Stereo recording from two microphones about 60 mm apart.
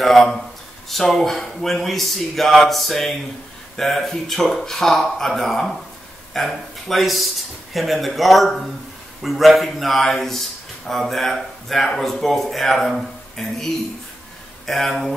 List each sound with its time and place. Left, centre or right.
0.0 s speech: centre
14.7 s speech: centre